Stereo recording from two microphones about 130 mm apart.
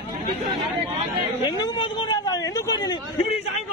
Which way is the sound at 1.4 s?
35° left (ahead or behind).